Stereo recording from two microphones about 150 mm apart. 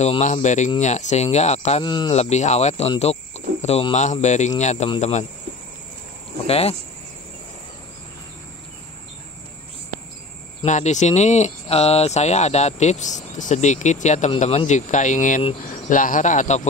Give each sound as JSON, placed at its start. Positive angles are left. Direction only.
{"t": 0.0, "sound": "speech", "side_deg": 50}
{"t": 1.8, "sound": "speech", "side_deg": 30}
{"t": 2.1, "sound": "speech", "side_deg": 50}
{"t": 6.4, "sound": "speech", "side_deg": 40}
{"t": 10.6, "sound": "speech", "side_deg": 50}